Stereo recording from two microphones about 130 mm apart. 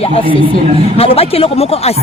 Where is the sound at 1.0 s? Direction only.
50° left (ahead or behind).